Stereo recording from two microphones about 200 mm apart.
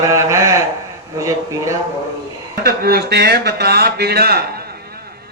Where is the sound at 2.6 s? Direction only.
50° right (ahead or behind).